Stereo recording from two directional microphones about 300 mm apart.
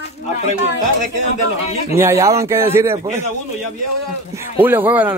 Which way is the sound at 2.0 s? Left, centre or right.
Centre.